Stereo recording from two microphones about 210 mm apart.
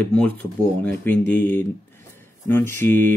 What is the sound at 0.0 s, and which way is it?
Speech, 5° left (ahead or behind).